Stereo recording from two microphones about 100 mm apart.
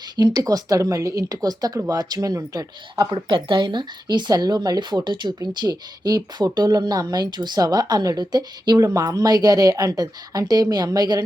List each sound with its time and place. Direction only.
0.2 s speech: 40° right (ahead or behind)
3.1 s speech: 60° right (ahead or behind); by 11.2 s 40° right (ahead or behind)